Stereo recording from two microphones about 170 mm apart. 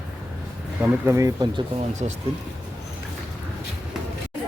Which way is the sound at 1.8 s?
40° right (ahead or behind).